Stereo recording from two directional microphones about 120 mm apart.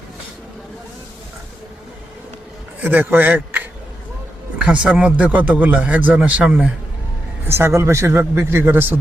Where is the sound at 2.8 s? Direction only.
15° right (ahead or behind).